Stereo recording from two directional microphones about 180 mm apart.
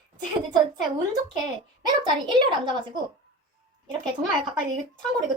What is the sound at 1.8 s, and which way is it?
Speech, 25° right (ahead or behind).